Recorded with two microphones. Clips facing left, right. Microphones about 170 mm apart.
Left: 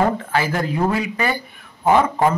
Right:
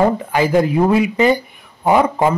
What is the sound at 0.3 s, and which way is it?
A man's voice, 15° right (ahead or behind).